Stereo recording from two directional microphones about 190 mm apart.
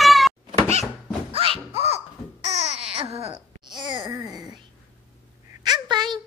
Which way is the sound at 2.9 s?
30° right (ahead or behind).